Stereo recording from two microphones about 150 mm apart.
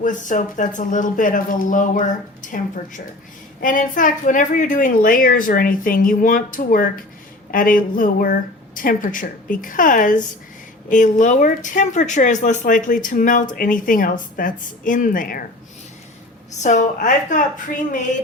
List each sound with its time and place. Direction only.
0.0 s a woman's voice: 60° left (ahead or behind)
16.6 s a woman's voice: 55° left (ahead or behind)